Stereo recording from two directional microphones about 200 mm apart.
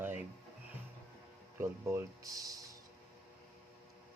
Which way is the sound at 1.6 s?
15° right (ahead or behind).